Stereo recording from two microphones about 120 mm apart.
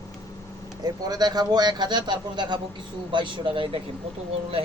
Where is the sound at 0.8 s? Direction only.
35° right (ahead or behind).